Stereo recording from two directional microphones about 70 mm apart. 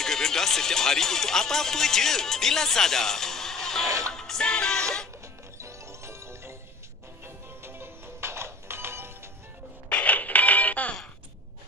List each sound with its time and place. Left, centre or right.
0.0 s speech: centre
4.1 s music: centre
5.6 s music: right
9.8 s music: centre